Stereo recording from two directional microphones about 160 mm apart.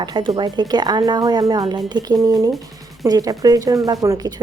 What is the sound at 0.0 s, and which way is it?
Speech, 25° right (ahead or behind).